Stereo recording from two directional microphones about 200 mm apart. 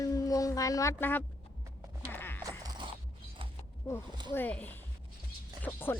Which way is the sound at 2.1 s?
10° left (ahead or behind).